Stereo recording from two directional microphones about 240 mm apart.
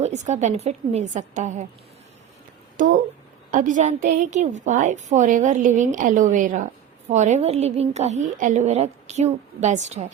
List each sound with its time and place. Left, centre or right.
0.0 s a woman's voice: right
2.8 s a woman's voice: right